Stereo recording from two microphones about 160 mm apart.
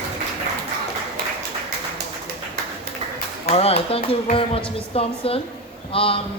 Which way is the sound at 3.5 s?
40° left (ahead or behind).